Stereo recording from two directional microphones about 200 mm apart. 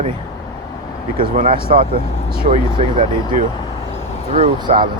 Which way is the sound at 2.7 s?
25° right (ahead or behind).